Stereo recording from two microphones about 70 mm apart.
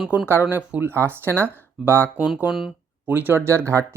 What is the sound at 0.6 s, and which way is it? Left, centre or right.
Speech, centre.